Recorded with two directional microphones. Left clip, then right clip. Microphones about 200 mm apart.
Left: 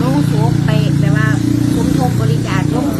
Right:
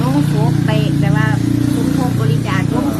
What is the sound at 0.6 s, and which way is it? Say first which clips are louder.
Vehicle: even; centre (ahead or behind).